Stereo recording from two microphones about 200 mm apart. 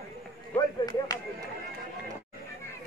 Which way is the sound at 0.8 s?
20° left (ahead or behind).